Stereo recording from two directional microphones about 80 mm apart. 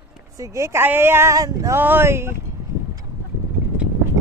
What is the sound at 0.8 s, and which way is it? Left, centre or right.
Speech, right.